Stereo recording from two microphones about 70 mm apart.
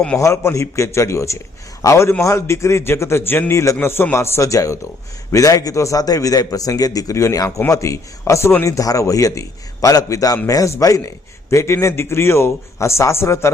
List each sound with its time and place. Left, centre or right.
0.2 s a man's voice: left
3.5 s a man's voice: left
8.6 s a man's voice: left
11.5 s a man's voice: left